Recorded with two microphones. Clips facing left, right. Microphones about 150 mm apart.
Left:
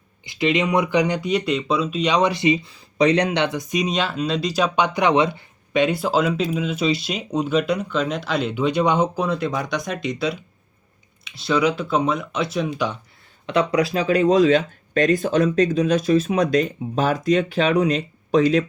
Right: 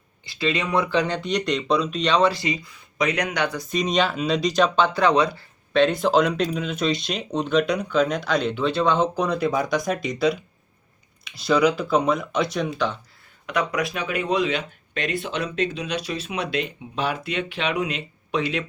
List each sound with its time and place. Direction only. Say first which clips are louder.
0.3 s speech: left 4 dB; 20° left (ahead or behind)
4.9 s speech: left 1 dB; 20° left (ahead or behind)
9.1 s speech: right 1 dB; centre (ahead or behind)
13.5 s speech: left 5 dB; 30° left (ahead or behind)